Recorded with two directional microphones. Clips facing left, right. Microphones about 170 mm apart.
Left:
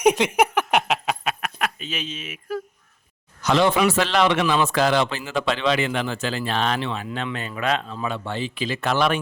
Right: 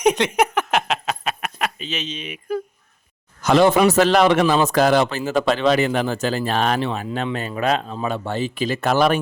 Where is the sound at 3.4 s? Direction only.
45° right (ahead or behind).